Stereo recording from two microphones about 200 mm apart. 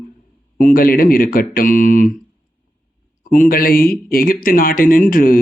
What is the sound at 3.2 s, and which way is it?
Speech, 40° left (ahead or behind).